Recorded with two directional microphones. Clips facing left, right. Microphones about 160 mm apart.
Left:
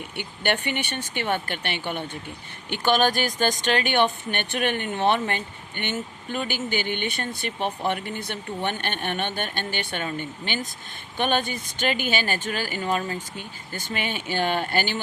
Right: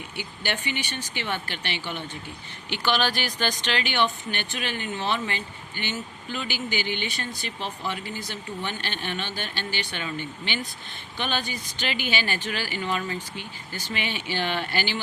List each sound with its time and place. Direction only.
0.2 s speech: 60° left (ahead or behind)